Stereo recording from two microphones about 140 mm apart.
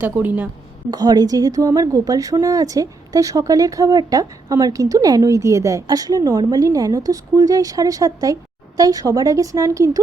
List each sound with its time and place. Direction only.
0.0 s a woman's voice: 10° right (ahead or behind)
0.9 s a woman's voice: 30° right (ahead or behind)